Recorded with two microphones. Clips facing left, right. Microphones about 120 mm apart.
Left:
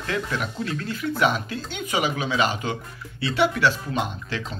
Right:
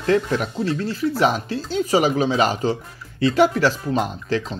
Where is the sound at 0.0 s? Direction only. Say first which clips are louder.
Right 8 dB; 35° right (ahead or behind).